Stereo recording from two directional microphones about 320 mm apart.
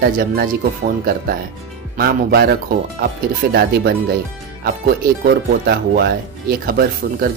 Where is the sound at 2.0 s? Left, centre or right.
Right.